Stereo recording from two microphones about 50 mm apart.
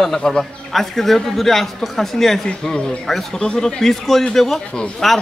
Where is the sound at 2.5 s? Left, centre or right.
Left.